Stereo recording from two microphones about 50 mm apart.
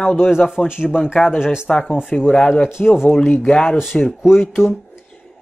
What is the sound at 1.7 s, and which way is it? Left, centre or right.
Speech, centre.